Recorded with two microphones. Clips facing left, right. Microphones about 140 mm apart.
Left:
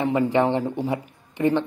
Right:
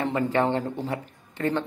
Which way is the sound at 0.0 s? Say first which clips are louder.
Left 4 dB; 10° left (ahead or behind).